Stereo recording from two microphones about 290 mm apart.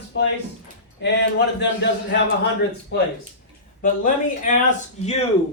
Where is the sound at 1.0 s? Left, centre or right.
Left.